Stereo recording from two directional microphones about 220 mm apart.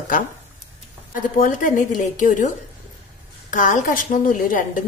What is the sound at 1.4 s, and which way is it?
A woman's voice, 40° left (ahead or behind).